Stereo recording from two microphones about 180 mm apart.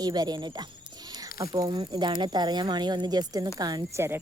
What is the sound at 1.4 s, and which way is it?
Speech, 20° right (ahead or behind).